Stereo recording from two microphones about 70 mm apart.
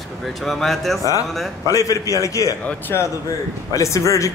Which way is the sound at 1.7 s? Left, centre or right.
Left.